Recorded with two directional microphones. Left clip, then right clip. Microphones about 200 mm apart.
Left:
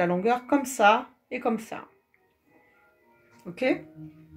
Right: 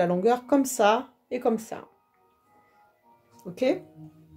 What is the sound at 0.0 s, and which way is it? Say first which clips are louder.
Speech: right 1 dB; 35° right (ahead or behind).